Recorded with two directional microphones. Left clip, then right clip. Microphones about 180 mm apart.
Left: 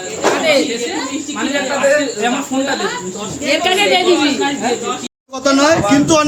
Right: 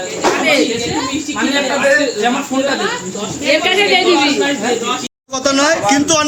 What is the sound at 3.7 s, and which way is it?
Speech, 85° left.